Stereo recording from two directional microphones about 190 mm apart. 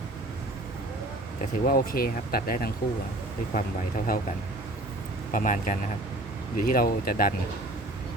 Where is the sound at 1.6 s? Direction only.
50° left (ahead or behind).